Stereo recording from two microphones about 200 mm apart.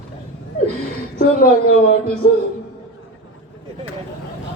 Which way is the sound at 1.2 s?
45° left (ahead or behind).